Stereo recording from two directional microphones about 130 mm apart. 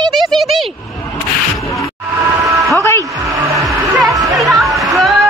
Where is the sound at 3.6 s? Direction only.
Centre (ahead or behind).